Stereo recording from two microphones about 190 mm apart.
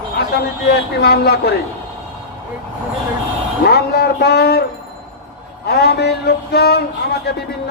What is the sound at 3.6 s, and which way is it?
A man's voice, 55° left (ahead or behind).